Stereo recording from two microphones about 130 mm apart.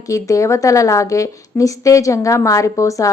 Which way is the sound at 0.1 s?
25° left (ahead or behind).